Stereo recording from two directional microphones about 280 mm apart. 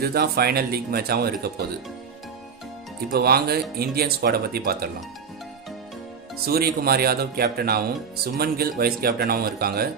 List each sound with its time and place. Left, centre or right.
0.0 s speech: right
3.1 s speech: right
6.4 s speech: right